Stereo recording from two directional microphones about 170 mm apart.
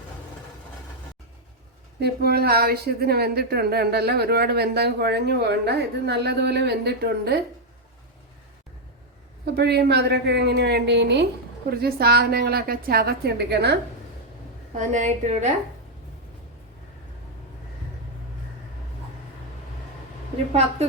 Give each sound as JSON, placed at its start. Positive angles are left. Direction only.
{"t": 2.0, "sound": "a woman's voice", "side_deg": -70}
{"t": 9.6, "sound": "a woman's voice", "side_deg": -75}
{"t": 11.7, "sound": "a woman's voice", "side_deg": -65}
{"t": 14.8, "sound": "a woman's voice", "side_deg": -45}